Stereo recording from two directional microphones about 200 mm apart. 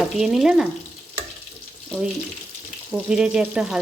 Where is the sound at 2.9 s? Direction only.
5° right (ahead or behind).